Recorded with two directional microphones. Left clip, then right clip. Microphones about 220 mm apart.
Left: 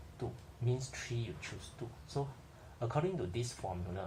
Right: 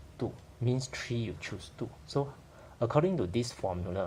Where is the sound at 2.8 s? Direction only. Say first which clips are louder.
Right 8 dB; 45° right (ahead or behind).